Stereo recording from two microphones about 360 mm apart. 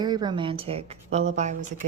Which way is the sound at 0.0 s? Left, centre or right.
Centre.